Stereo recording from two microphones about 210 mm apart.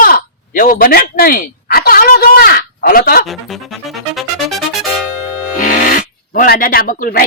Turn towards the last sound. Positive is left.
turn(degrees=40)  # may be behind; listen again after turning